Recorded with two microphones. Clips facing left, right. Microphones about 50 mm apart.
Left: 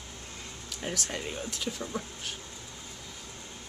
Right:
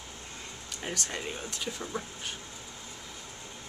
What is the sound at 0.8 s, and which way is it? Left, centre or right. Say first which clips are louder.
Speech: left 1 dB; centre.